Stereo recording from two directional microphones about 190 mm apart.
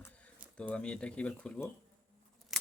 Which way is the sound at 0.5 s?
5° left (ahead or behind).